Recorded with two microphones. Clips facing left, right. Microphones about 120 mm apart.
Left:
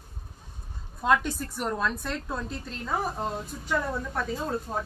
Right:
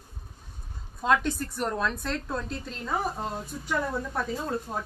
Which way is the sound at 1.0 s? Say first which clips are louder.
Even; centre (ahead or behind).